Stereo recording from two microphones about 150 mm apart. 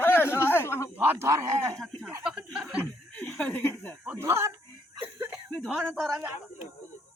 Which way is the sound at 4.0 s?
15° right (ahead or behind).